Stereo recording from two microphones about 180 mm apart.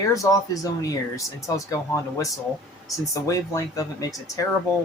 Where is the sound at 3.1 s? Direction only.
20° left (ahead or behind).